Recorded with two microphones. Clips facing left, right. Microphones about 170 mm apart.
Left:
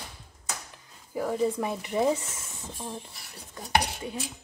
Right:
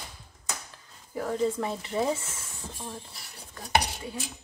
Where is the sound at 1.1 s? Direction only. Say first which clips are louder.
Left 1 dB; 10° left (ahead or behind).